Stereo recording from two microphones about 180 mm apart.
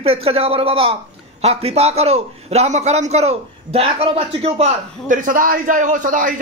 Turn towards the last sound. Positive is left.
turn(degrees=-50)  # may be behind; listen again after turning